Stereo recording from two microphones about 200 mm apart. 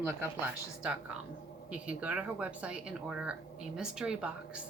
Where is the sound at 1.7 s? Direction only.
5° right (ahead or behind).